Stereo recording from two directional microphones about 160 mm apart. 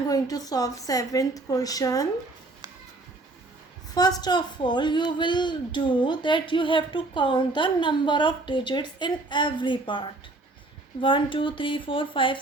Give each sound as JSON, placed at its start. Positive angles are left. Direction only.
{"t": 0.1, "sound": "speech", "side_deg": 25}
{"t": 3.9, "sound": "speech", "side_deg": 25}
{"t": 11.0, "sound": "speech", "side_deg": 30}